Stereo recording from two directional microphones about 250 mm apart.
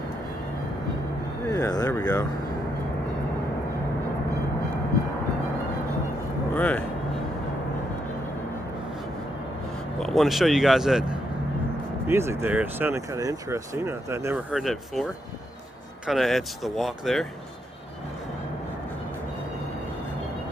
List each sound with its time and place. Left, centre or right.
1.5 s speech: centre
6.5 s speech: centre
10.0 s speech: centre
16.0 s speech: centre